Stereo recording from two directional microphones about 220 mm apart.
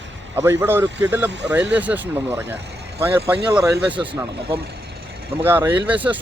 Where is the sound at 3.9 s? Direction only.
20° right (ahead or behind).